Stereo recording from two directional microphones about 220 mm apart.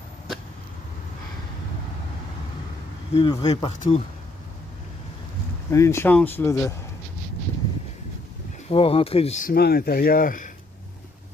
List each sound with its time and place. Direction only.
3.2 s speech: 20° left (ahead or behind)
5.7 s speech: 10° left (ahead or behind)
8.6 s speech: 25° left (ahead or behind)